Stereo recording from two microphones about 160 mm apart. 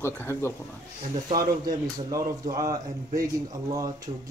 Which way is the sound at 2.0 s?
25° right (ahead or behind).